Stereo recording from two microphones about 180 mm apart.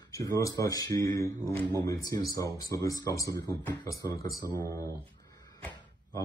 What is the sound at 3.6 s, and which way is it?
Speech, 10° left (ahead or behind).